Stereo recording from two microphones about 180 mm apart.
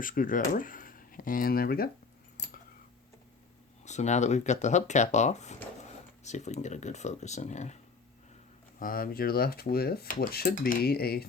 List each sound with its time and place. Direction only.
0.0 s speech: 50° left (ahead or behind)
3.8 s speech: 40° left (ahead or behind)
8.8 s speech: 55° left (ahead or behind)